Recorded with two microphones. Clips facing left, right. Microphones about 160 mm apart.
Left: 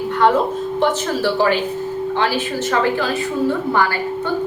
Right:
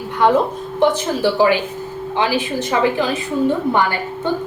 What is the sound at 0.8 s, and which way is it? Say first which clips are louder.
A woman's voice: right 3 dB; 15° right (ahead or behind).